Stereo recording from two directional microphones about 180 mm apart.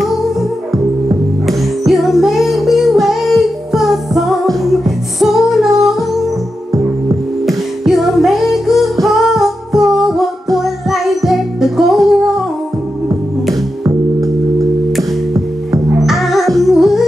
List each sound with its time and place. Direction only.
0.0 s music: centre (ahead or behind)
7.4 s music: centre (ahead or behind)
13.8 s organ: 15° right (ahead or behind)
16.1 s music: centre (ahead or behind)